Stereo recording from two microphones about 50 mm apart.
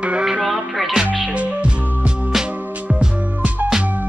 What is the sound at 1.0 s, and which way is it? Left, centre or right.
Music, right.